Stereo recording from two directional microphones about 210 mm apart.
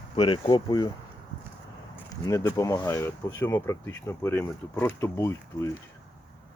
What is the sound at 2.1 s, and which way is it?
Speech, 15° left (ahead or behind).